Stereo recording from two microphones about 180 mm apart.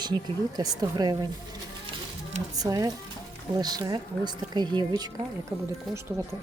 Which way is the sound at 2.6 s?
20° right (ahead or behind).